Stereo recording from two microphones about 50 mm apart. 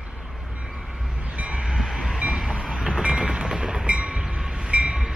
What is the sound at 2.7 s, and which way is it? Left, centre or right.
Train, centre.